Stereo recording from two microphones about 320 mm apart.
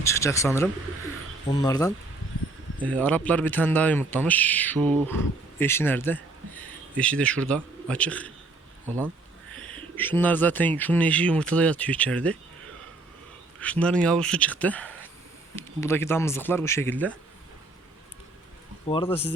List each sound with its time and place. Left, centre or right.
0.0 s speech: centre
9.6 s speech: centre
13.6 s speech: centre
18.9 s speech: centre